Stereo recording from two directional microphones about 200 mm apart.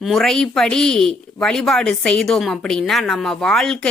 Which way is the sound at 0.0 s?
Centre (ahead or behind).